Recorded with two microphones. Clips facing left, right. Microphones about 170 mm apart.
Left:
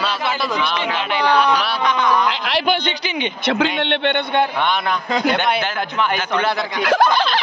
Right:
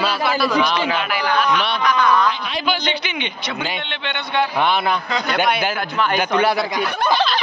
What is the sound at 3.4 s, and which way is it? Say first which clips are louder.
Speech: left 13 dB; 75° left (ahead or behind).